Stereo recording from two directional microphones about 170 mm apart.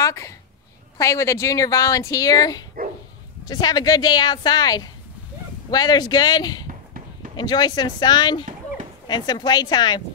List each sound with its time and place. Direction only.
0.0 s a woman's voice: 20° left (ahead or behind)
6.7 s run: 50° right (ahead or behind)
7.3 s speech: 25° left (ahead or behind)